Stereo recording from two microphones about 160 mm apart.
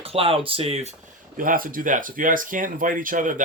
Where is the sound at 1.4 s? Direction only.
60° right (ahead or behind).